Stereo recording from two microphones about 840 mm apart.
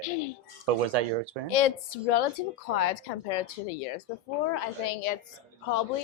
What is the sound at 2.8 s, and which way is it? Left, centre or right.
Speech, left.